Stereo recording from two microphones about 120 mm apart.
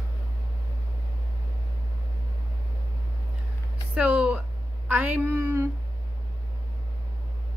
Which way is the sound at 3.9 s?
10° right (ahead or behind).